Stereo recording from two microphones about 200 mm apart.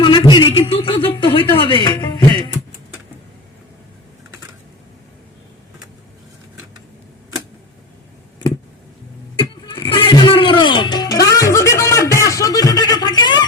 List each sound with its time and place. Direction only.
0.0 s a sound: 20° left (ahead or behind)
1.5 s music: 25° left (ahead or behind)
9.3 s music: 25° left (ahead or behind)